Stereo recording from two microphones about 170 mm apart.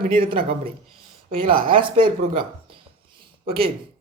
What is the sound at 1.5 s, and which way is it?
Speech, 55° right (ahead or behind).